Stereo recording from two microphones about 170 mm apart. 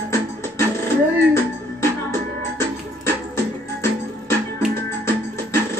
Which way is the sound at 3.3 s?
15° left (ahead or behind).